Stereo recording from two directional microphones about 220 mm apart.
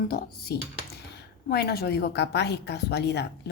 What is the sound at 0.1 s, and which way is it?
A woman's voice, 45° left (ahead or behind).